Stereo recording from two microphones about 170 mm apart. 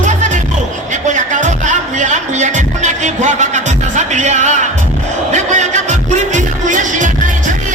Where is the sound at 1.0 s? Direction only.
45° right (ahead or behind).